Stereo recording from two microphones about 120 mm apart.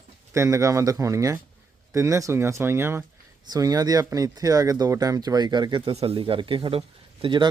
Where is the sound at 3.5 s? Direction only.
30° right (ahead or behind).